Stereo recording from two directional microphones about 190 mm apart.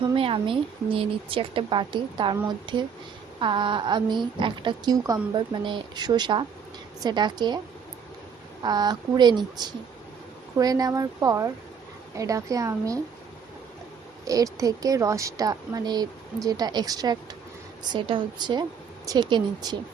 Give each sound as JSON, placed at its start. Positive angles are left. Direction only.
{"t": 0.0, "sound": "a woman's voice", "side_deg": -25}
{"t": 8.6, "sound": "a woman's voice", "side_deg": -20}
{"t": 14.3, "sound": "a woman's voice", "side_deg": -15}